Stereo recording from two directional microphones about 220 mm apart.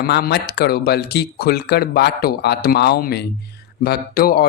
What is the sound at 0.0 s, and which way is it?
Speech, 45° left (ahead or behind).